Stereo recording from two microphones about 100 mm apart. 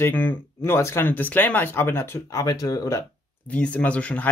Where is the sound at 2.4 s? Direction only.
40° left (ahead or behind).